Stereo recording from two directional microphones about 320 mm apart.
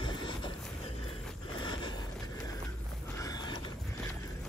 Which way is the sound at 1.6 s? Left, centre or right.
Centre.